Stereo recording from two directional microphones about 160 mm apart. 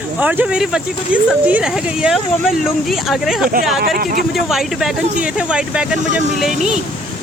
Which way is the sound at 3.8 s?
65° right (ahead or behind).